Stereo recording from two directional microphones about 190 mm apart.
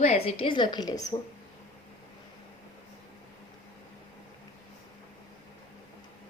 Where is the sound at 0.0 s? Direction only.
35° left (ahead or behind).